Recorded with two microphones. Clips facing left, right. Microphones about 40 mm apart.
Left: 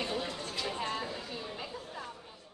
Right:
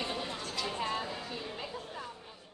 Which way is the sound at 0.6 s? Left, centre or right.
Centre.